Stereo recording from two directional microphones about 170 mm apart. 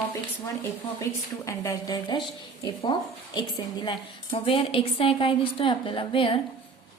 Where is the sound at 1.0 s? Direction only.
20° left (ahead or behind).